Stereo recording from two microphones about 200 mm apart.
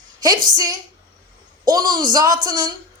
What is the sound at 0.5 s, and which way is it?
A woman's voice, 20° right (ahead or behind).